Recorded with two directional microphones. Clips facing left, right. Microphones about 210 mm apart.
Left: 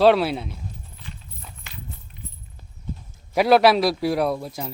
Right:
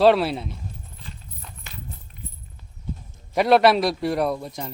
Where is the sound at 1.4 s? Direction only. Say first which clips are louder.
Right 1 dB; 5° left (ahead or behind).